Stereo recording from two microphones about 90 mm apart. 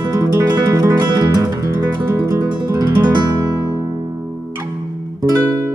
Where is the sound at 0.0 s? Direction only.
40° right (ahead or behind).